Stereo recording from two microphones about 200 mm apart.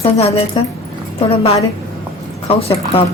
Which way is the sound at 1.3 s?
30° left (ahead or behind).